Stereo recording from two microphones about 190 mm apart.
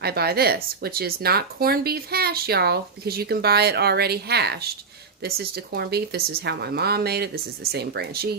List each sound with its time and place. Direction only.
0.0 s speech: 55° right (ahead or behind)